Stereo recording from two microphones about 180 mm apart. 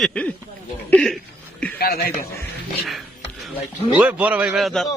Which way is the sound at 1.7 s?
60° left (ahead or behind).